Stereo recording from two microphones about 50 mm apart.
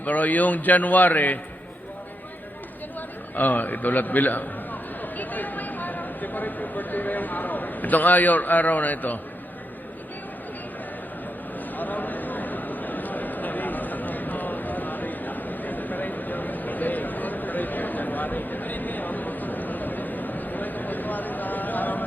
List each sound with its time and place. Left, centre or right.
0.0 s a man's voice: left
3.3 s a man's voice: left
11.8 s a sound: left